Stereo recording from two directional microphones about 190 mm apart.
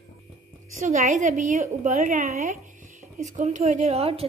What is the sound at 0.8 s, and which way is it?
A woman's voice, 40° right (ahead or behind).